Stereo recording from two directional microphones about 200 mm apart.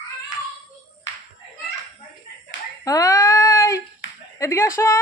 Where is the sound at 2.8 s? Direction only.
15° left (ahead or behind).